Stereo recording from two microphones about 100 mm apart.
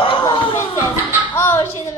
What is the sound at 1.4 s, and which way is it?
Speech, 25° left (ahead or behind).